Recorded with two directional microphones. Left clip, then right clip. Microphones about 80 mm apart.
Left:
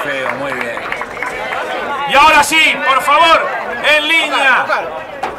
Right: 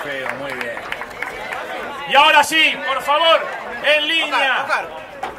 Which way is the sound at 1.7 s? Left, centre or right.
Centre.